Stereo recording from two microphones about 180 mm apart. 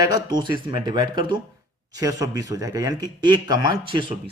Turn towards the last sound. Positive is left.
turn(degrees=-25)  # may be behind; listen again after turning